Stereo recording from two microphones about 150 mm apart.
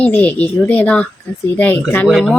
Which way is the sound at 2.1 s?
Centre (ahead or behind).